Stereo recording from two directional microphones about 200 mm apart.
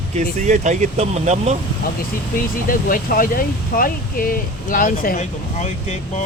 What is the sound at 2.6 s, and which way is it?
Speech, 45° left (ahead or behind).